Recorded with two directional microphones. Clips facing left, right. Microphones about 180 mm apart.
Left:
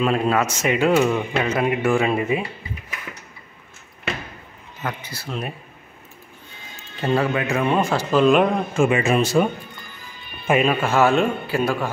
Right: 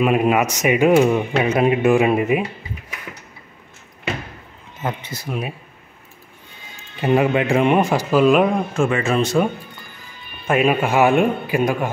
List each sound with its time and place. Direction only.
0.0 s a man's voice: 15° right (ahead or behind)
4.8 s speech: 20° right (ahead or behind)
7.0 s a man's voice: 15° right (ahead or behind); by 8.8 s centre (ahead or behind)
8.8 s speech: 10° left (ahead or behind)
10.6 s a man's voice: 15° right (ahead or behind)